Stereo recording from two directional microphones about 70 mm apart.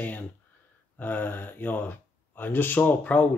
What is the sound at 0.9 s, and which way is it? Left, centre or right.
Speech, left.